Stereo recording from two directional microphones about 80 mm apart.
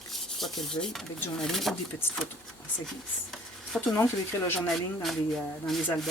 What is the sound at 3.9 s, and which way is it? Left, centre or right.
Speech, left.